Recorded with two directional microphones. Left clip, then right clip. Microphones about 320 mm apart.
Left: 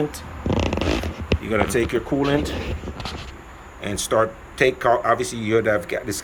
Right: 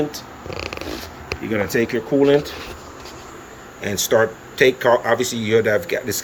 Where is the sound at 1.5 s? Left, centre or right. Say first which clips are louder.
Right 1 dB; centre.